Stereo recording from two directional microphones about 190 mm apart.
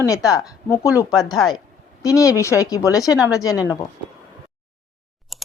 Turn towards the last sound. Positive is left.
turn(degrees=0)  # may be behind; listen again after turning